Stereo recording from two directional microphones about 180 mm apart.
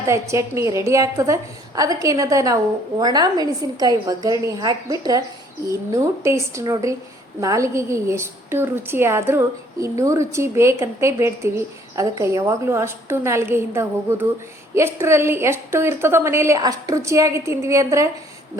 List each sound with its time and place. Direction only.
0.1 s a woman's voice: 15° right (ahead or behind)